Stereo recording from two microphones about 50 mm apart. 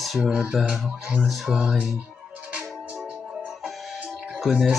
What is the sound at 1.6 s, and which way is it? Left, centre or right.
Music, centre.